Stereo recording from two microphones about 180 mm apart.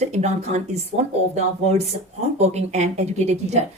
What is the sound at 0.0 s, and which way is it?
Speech, 40° right (ahead or behind).